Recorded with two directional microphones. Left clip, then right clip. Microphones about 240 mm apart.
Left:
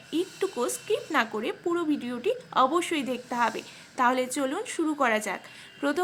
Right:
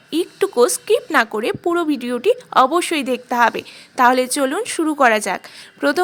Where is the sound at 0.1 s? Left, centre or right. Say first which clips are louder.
Right 10 dB; right.